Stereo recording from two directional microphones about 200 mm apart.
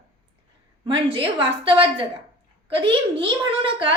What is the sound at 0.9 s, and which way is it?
A woman's voice, 25° right (ahead or behind).